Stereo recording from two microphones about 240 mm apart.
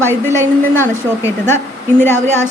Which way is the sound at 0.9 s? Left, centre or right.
Centre.